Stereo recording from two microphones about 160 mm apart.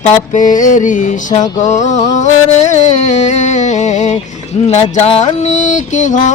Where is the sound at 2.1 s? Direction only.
45° left (ahead or behind).